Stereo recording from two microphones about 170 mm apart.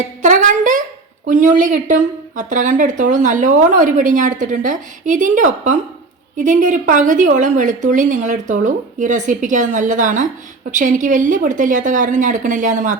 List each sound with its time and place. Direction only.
0.2 s a woman's voice: 45° right (ahead or behind)